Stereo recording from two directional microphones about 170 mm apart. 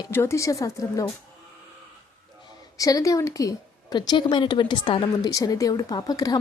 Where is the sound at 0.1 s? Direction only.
15° left (ahead or behind).